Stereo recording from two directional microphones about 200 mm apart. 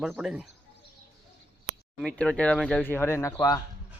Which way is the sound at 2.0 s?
5° left (ahead or behind).